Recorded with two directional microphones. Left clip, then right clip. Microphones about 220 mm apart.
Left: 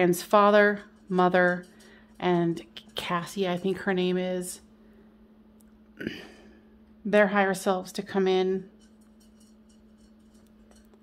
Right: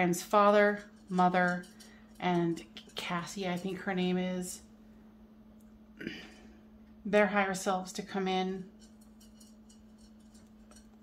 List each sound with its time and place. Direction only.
0.0 s speech: 45° left (ahead or behind)
5.9 s a sound: 45° left (ahead or behind)
7.1 s speech: 45° left (ahead or behind)